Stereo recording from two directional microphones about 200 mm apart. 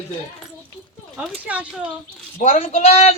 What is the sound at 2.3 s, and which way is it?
Speech, 40° left (ahead or behind).